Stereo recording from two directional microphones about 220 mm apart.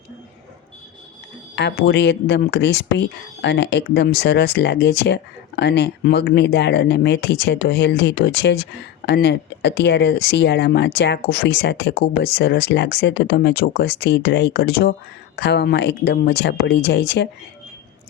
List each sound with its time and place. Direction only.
1.5 s speech: 50° left (ahead or behind)